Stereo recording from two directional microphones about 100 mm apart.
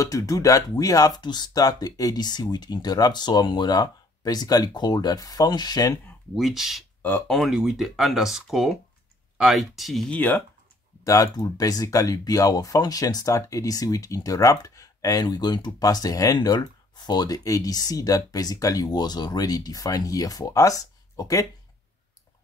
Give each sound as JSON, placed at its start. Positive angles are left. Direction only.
{"t": 0.0, "sound": "speech", "side_deg": 35}
{"t": 6.3, "sound": "speech", "side_deg": 0}
{"t": 7.0, "sound": "speech", "side_deg": 20}
{"t": 7.2, "sound": "speech", "side_deg": 0}
{"t": 10.0, "sound": "speech", "side_deg": 15}
{"t": 11.1, "sound": "speech", "side_deg": 35}